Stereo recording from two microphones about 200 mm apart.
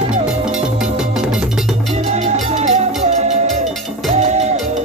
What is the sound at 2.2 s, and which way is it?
Music, 35° right (ahead or behind).